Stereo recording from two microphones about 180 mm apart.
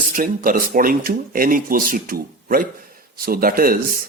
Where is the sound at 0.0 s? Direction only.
50° right (ahead or behind).